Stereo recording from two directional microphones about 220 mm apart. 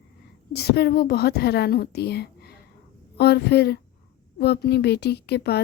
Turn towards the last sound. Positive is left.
turn(degrees=50)  # may be behind; listen again after turning